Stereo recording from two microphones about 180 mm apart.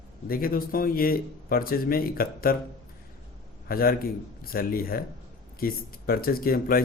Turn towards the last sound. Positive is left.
turn(degrees=55)  # may be behind; listen again after turning